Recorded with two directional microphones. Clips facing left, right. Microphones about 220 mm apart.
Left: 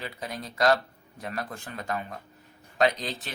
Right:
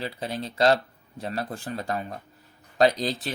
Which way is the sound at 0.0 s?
30° right (ahead or behind).